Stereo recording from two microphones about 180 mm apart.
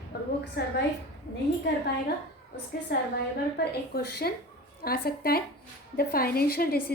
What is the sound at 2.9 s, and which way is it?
A woman's voice, 65° left (ahead or behind).